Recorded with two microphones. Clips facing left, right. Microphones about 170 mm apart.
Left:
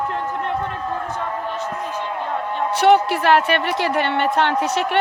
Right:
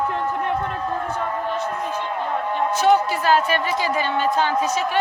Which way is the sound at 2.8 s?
65° left (ahead or behind).